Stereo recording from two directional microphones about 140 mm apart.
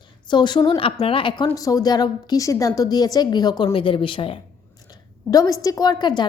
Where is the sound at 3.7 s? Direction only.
40° left (ahead or behind).